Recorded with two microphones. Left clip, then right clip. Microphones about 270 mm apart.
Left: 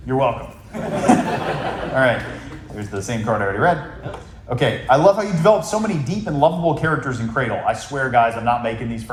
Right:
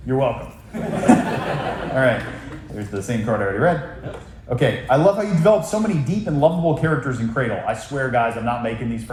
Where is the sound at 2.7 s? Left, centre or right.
Centre.